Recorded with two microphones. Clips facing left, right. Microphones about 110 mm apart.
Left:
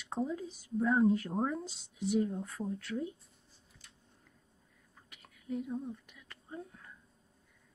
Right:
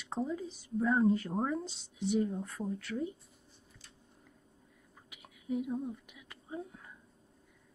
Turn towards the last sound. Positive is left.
turn(degrees=-10)  # may be behind; listen again after turning